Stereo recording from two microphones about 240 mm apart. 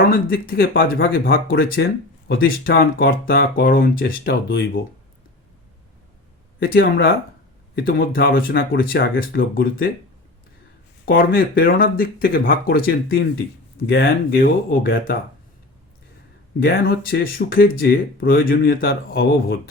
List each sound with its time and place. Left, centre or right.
0.0 s speech: left
6.6 s speech: left
11.0 s speech: left
16.6 s speech: left